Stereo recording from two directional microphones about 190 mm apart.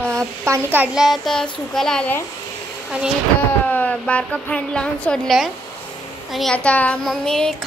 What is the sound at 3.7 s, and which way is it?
A woman's voice, 10° left (ahead or behind).